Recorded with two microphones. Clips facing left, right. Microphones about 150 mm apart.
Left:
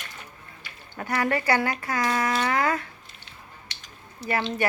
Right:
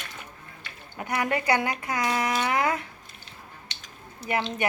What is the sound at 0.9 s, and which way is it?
Speech, 15° right (ahead or behind).